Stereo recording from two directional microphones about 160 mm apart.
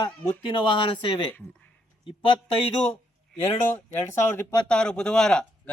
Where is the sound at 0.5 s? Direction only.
30° left (ahead or behind).